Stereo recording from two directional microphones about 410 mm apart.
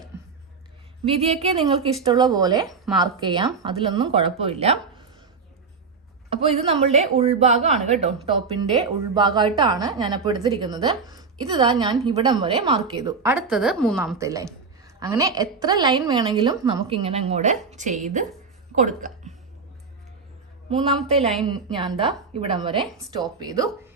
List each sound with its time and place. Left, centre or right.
1.0 s a woman's voice: centre
6.3 s a woman's voice: centre
9.1 s a woman's voice: centre
20.7 s a woman's voice: centre
22.9 s a woman's voice: centre